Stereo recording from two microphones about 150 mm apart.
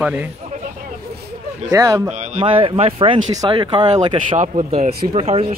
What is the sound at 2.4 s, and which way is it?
Speech, 35° right (ahead or behind).